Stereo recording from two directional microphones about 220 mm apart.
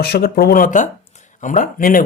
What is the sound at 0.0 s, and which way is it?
Speech, 45° left (ahead or behind).